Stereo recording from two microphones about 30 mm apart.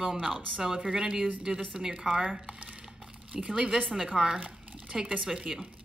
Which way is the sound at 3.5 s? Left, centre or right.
Right.